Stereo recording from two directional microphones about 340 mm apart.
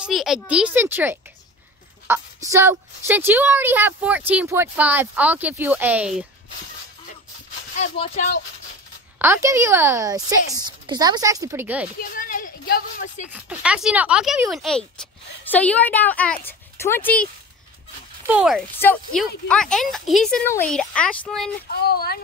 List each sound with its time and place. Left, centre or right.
0.0 s a woman's voice: centre
7.8 s speech: centre
9.2 s a woman's voice: centre
12.0 s a sound: left
13.3 s speech: centre
21.8 s speech: left